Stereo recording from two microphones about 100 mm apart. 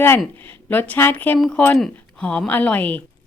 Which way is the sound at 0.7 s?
20° left (ahead or behind).